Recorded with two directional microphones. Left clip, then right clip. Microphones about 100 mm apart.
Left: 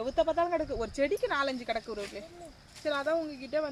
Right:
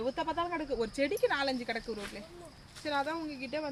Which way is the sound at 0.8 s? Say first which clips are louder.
Left 1 dB; 45° right (ahead or behind).